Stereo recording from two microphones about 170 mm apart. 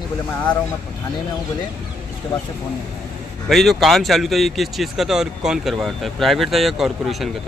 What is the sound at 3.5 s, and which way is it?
Speech, centre (ahead or behind).